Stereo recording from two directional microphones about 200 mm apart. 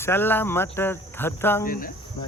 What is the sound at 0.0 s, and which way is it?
Speech, 10° left (ahead or behind).